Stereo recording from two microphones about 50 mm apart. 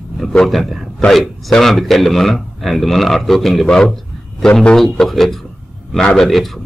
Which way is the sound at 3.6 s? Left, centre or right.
Centre.